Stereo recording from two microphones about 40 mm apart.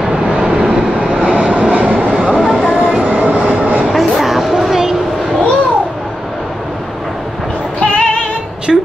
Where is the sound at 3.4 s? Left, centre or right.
Right.